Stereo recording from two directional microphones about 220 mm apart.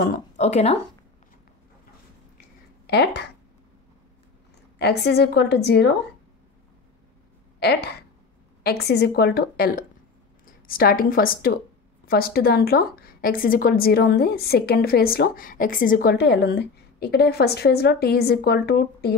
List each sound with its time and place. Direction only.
0.0 s speech: 35° left (ahead or behind)
2.9 s a woman's voice: 50° left (ahead or behind)
4.7 s a woman's voice: 45° left (ahead or behind)
8.6 s a woman's voice: 45° left (ahead or behind)